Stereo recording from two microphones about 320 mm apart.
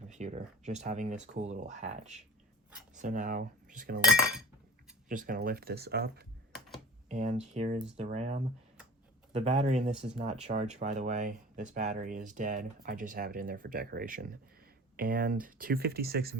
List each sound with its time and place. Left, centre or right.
0.1 s speech: right
5.0 s speech: right